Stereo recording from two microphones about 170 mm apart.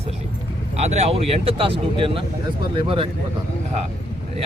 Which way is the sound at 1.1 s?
35° right (ahead or behind).